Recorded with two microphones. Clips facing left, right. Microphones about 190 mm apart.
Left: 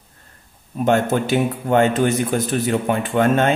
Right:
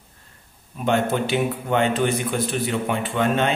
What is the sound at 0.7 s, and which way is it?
A man's voice, 45° left (ahead or behind).